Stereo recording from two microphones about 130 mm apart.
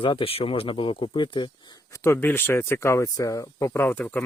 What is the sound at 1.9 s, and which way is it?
Speech, 20° left (ahead or behind).